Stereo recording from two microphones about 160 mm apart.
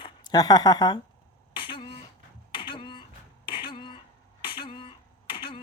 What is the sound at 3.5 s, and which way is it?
Throat clearing, 30° left (ahead or behind).